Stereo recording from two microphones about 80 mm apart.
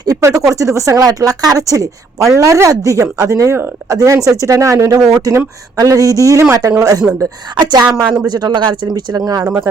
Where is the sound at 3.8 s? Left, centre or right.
Right.